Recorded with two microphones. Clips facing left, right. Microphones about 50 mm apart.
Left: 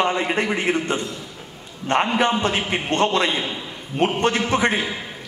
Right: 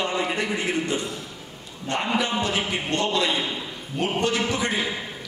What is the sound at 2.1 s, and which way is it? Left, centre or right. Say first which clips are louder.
A man's voice: left 4 dB; left.